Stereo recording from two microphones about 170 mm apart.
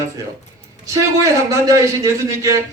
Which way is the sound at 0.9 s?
20° right (ahead or behind).